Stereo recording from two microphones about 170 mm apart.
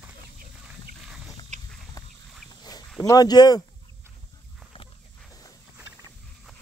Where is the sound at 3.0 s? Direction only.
20° left (ahead or behind).